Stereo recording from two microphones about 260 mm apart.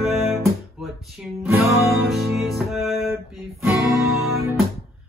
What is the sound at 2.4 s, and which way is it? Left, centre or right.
Music, centre.